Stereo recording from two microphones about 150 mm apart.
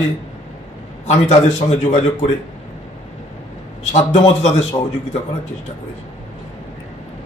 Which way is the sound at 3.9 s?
50° left (ahead or behind).